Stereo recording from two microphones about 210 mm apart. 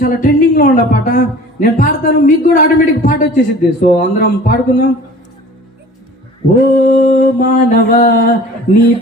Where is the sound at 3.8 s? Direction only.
40° left (ahead or behind).